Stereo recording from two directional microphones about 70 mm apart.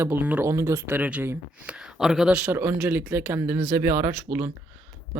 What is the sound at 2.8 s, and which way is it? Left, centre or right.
Speech, right.